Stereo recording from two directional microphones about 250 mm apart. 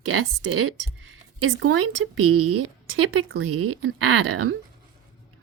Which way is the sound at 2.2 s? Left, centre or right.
Right.